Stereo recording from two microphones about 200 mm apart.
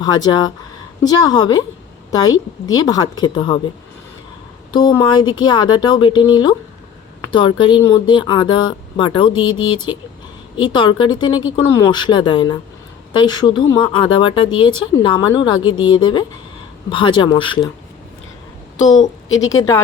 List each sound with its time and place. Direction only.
0.0 s speech: 20° left (ahead or behind)
4.7 s speech: 20° left (ahead or behind)
18.8 s a woman's voice: 35° left (ahead or behind)
19.3 s a woman's voice: 15° left (ahead or behind)